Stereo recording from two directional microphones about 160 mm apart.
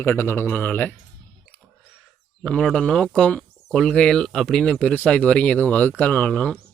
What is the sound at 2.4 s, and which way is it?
Speech, 5° left (ahead or behind).